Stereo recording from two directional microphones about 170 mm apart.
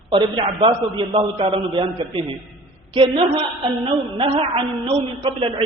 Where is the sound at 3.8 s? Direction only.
30° right (ahead or behind).